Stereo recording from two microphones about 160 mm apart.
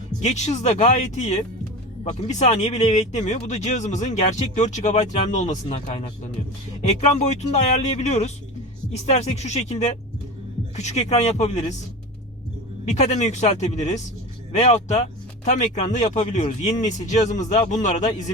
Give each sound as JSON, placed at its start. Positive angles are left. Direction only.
{"t": 0.2, "sound": "speech", "side_deg": 45}
{"t": 12.8, "sound": "speech", "side_deg": 45}